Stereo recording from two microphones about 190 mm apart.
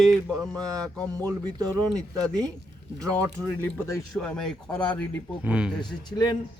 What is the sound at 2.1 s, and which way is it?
Speech, 5° left (ahead or behind).